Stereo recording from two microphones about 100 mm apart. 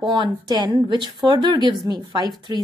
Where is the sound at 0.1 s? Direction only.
50° right (ahead or behind).